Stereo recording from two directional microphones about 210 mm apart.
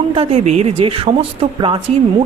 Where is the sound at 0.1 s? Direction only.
30° right (ahead or behind).